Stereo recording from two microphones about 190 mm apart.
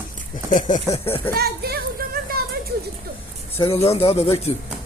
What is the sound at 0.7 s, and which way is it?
Speech, 30° left (ahead or behind).